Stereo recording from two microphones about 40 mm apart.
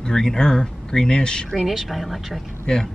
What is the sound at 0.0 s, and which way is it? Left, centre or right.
Speech, centre.